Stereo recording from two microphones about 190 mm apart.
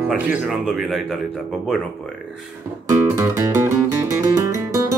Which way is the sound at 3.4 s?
15° right (ahead or behind).